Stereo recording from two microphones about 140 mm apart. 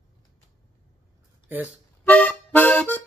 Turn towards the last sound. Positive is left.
turn(degrees=15)  # may be behind; listen again after turning